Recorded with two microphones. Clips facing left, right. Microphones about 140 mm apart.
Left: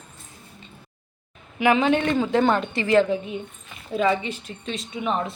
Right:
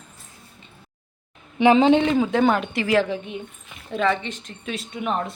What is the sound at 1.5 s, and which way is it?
Speech, 30° right (ahead or behind).